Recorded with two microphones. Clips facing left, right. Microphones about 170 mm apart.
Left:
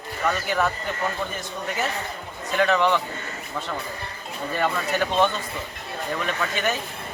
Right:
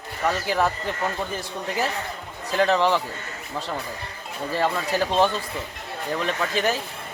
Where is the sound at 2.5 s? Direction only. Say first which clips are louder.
Even; 30° right (ahead or behind).